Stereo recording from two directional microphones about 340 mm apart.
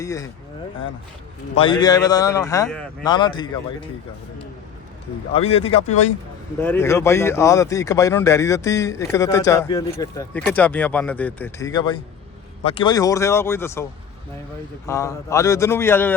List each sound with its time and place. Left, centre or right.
0.0 s speech: centre
1.5 s speech: centre
5.3 s speech: centre
6.6 s speech: centre
14.8 s speech: centre